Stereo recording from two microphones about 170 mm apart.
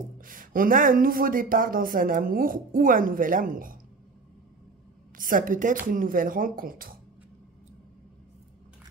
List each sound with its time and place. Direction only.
0.2 s speech: 55° right (ahead or behind)
5.1 s a woman's voice: 55° right (ahead or behind)